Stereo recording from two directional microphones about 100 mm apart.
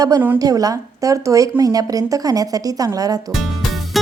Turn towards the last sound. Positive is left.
turn(degrees=0)  # may be behind; listen again after turning